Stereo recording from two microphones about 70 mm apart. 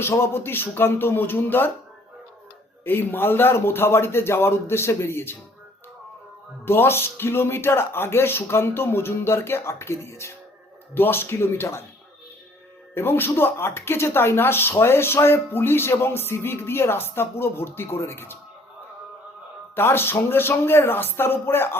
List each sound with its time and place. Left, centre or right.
0.0 s speech: left
2.8 s speech: left
6.7 s speech: left
10.9 s speech: left
12.9 s speech: left
19.7 s speech: left